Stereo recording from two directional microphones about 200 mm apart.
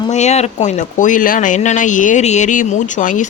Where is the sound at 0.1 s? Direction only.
35° left (ahead or behind).